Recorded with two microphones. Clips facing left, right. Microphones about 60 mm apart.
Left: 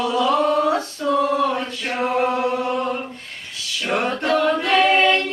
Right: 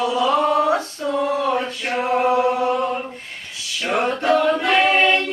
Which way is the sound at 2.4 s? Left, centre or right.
Centre.